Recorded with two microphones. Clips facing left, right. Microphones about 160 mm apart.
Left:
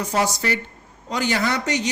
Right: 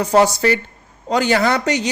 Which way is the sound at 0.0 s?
65° right (ahead or behind).